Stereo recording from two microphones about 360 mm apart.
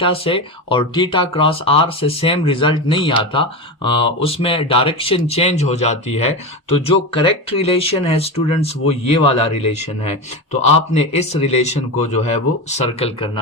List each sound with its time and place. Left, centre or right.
0.0 s speech: centre